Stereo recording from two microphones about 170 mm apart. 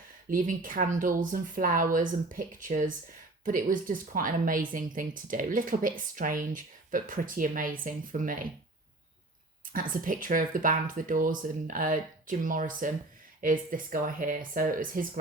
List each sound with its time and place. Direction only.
0.3 s speech: 55° right (ahead or behind)
9.9 s speech: 55° right (ahead or behind)